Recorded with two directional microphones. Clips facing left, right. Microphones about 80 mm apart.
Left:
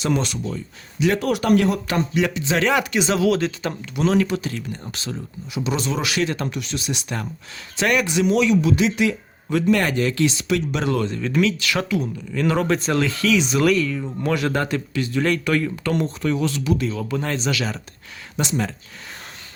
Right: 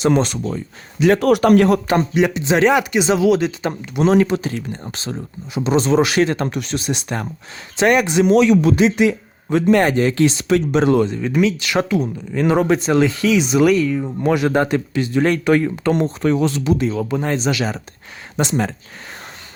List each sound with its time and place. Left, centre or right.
0.0 s speech: right
1.9 s speech: right
2.7 s speech: centre
3.8 s speech: right
7.8 s speech: right
8.2 s speech: right
11.1 s speech: centre; by 18.7 s right